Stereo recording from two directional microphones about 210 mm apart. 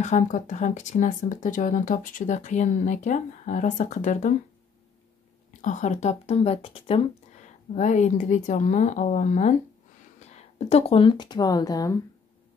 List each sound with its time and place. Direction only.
0.0 s speech: 35° left (ahead or behind)
5.6 s speech: 35° left (ahead or behind); by 12.0 s 15° left (ahead or behind)